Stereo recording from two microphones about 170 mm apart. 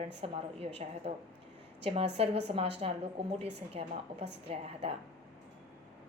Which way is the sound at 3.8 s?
40° right (ahead or behind).